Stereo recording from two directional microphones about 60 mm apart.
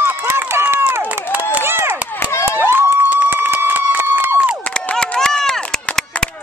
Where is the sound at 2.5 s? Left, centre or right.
Right.